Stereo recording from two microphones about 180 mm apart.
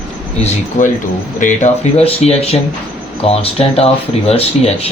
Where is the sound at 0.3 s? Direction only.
35° left (ahead or behind).